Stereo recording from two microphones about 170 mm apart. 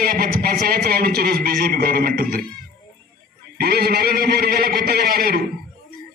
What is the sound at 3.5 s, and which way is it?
A man's voice, 65° right (ahead or behind).